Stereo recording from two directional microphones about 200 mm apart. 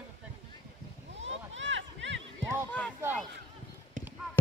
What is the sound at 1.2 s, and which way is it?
Speech, 70° right (ahead or behind).